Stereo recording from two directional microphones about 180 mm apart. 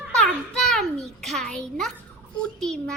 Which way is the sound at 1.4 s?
5° left (ahead or behind).